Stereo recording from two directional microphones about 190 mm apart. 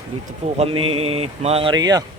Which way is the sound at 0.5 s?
30° right (ahead or behind).